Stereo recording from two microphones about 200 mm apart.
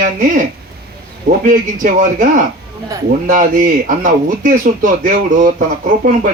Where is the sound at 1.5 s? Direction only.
45° right (ahead or behind).